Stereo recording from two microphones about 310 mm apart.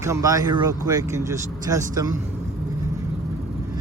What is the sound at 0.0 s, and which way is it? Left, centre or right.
Speech, centre.